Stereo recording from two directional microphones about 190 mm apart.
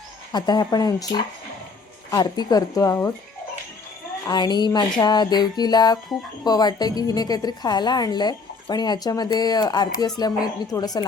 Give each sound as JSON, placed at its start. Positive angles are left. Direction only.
{"t": 0.3, "sound": "a woman's voice", "side_deg": 20}
{"t": 4.3, "sound": "a woman's voice", "side_deg": 20}